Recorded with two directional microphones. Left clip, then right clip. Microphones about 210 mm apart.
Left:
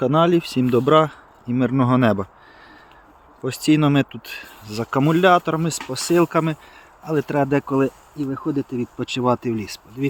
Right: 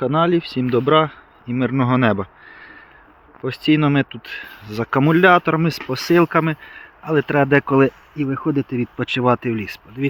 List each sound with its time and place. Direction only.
0.0 s speech: 20° left (ahead or behind); by 6.2 s 15° right (ahead or behind)
6.2 s speech: centre (ahead or behind)
7.7 s speech: 20° right (ahead or behind)
9.0 s speech: 5° right (ahead or behind)